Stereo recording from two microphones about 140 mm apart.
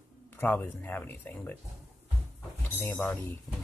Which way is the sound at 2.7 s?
15° left (ahead or behind).